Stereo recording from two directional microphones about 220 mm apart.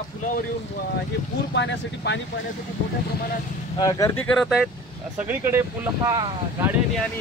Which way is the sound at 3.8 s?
15° left (ahead or behind).